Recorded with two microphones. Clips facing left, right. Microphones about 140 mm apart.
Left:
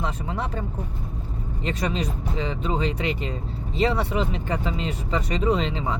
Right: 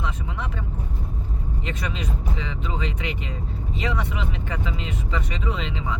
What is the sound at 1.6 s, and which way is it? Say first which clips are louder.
Speech: left 6 dB; 35° left (ahead or behind).